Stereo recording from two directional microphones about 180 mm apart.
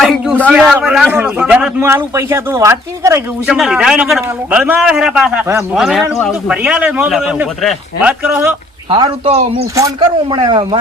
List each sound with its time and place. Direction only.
0.0 s a sound: centre (ahead or behind)
0.5 s a man's voice: 5° right (ahead or behind)
3.4 s a man's voice: centre (ahead or behind)
5.7 s a man's voice: centre (ahead or behind)
8.9 s speech: 30° right (ahead or behind)
9.7 s speech: 20° right (ahead or behind)